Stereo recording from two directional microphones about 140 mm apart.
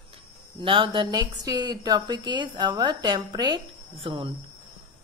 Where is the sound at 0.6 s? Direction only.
35° right (ahead or behind).